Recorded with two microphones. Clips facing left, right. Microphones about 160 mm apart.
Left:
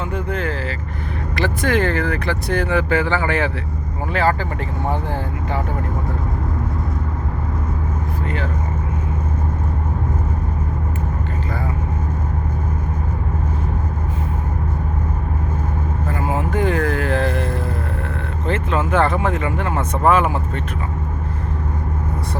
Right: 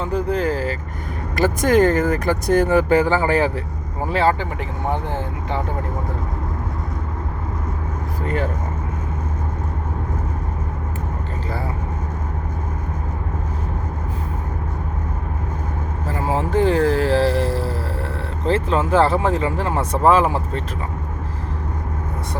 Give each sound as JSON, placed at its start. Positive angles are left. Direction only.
{"t": 0.0, "sound": "speech", "side_deg": -35}
{"t": 4.1, "sound": "speech", "side_deg": -25}
{"t": 16.1, "sound": "speech", "side_deg": -30}